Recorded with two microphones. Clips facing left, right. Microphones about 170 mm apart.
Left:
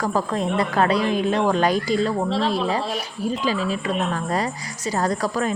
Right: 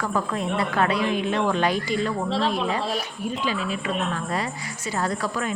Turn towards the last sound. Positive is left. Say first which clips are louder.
# left 4 dB
turn(degrees=40)  # may be behind; listen again after turning